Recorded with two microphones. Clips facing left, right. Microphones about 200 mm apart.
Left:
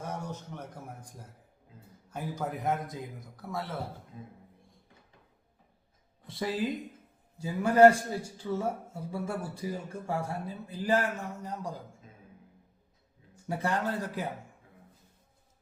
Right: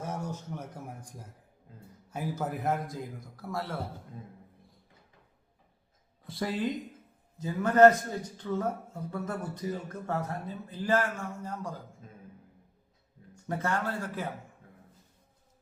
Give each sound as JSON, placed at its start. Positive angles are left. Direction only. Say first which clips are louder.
{"t": 0.0, "sound": "a sound", "louder": "right 2 dB", "side_deg": -10}
{"t": 2.0, "sound": "a man's voice", "louder": "right 1 dB", "side_deg": -10}
{"t": 6.2, "sound": "a man's voice", "louder": "even", "side_deg": 0}
{"t": 13.5, "sound": "a man's voice", "louder": "left 1 dB", "side_deg": 15}